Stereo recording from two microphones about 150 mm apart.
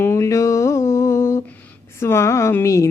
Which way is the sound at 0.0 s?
20° left (ahead or behind).